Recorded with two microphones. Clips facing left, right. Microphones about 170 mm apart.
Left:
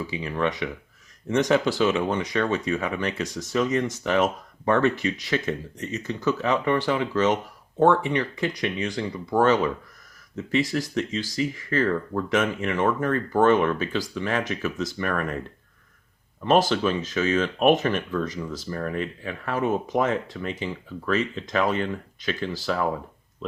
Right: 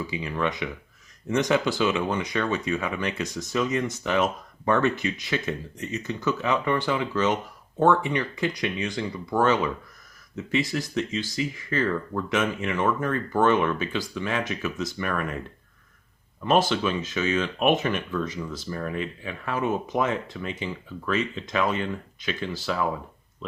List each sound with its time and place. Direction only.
0.1 s speech: 40° left (ahead or behind)
16.4 s speech: 40° left (ahead or behind)